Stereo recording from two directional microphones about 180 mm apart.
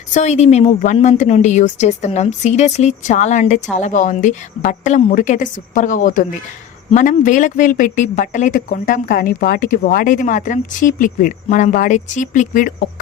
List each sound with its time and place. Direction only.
0.1 s a woman's voice: 40° left (ahead or behind)